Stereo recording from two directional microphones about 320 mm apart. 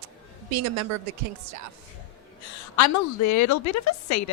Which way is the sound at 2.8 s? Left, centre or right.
Left.